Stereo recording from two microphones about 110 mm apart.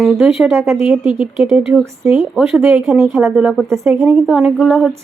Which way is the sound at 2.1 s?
5° right (ahead or behind).